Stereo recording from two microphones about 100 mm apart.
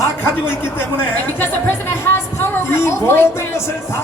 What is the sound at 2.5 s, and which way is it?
Speech, 25° left (ahead or behind).